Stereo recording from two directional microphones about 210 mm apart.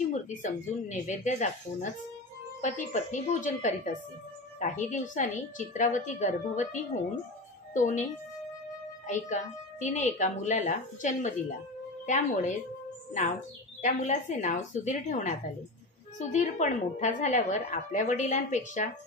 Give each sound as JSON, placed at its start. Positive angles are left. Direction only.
{"t": 0.3, "sound": "a woman's voice", "side_deg": 35}